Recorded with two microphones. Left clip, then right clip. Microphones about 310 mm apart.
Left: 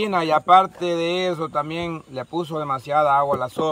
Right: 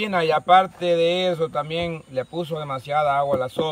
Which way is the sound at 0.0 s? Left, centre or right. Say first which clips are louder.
Left 1 dB; centre.